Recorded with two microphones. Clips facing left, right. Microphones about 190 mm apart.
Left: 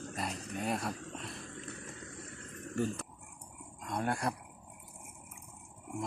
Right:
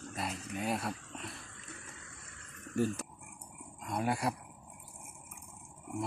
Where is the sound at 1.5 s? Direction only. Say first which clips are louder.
Left 6 dB; 40° left (ahead or behind).